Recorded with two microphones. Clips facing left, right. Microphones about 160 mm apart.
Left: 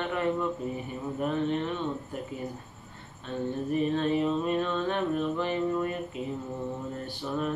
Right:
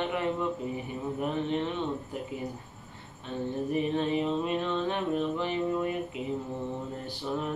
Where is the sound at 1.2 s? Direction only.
15° right (ahead or behind).